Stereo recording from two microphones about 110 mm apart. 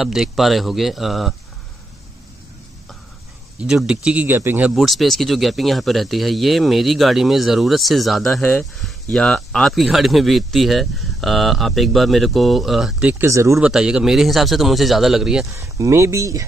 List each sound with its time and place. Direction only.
0.0 s speech: 5° right (ahead or behind)
3.5 s speech: 5° right (ahead or behind)
4.7 s speech: centre (ahead or behind)
8.4 s speech: 10° left (ahead or behind)
13.2 s speech: 25° right (ahead or behind)
13.6 s speech: 5° right (ahead or behind)
15.5 s speech: 30° right (ahead or behind)